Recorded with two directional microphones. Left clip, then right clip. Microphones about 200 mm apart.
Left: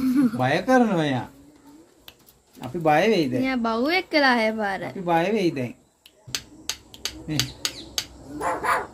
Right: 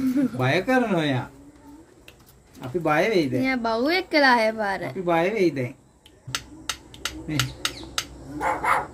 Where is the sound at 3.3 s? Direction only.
Centre (ahead or behind).